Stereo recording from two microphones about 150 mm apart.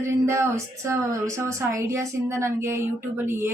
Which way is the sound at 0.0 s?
20° right (ahead or behind).